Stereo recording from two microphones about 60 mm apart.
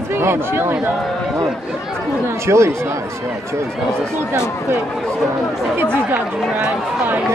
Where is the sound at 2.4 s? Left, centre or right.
Right.